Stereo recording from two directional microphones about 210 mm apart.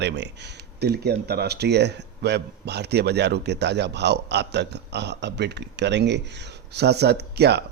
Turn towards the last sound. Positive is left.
turn(degrees=-50)  # may be behind; listen again after turning